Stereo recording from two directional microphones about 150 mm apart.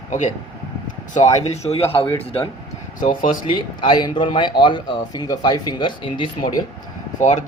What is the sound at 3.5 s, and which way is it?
Speech, 30° left (ahead or behind).